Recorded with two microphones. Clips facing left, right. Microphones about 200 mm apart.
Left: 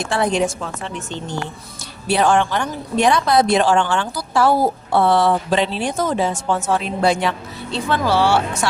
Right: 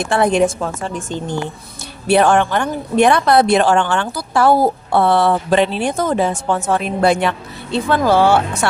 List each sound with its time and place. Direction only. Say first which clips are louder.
0.0 s a woman's voice: right 4 dB; 55° right (ahead or behind)
2.0 s a woman's voice: right 4 dB; 60° right (ahead or behind)